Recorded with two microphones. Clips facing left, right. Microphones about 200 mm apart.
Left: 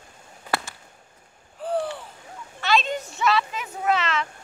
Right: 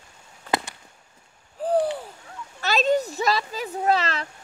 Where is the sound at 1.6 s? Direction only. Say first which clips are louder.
Right 4 dB; 40° right (ahead or behind).